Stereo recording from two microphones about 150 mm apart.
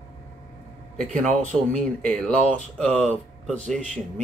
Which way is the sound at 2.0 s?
10° left (ahead or behind).